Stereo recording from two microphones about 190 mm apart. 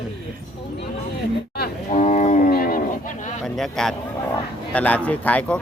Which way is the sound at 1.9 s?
40° left (ahead or behind).